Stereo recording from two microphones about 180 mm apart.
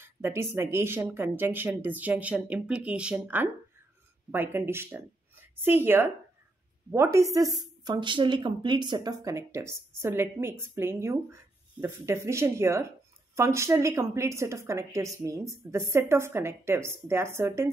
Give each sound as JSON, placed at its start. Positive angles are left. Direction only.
{"t": 0.0, "sound": "a woman's voice", "side_deg": -15}